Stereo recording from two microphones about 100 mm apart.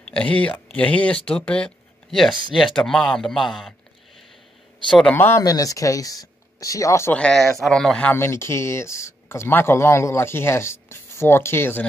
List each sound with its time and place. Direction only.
0.1 s speech: 10° left (ahead or behind)
4.8 s speech: 5° left (ahead or behind)
5.1 s speech: 20° left (ahead or behind)
5.4 s speech: 35° left (ahead or behind)
7.2 s speech: 10° left (ahead or behind)
8.1 s speech: 25° left (ahead or behind)